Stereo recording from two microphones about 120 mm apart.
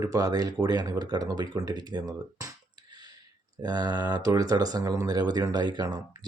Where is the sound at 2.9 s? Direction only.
35° right (ahead or behind).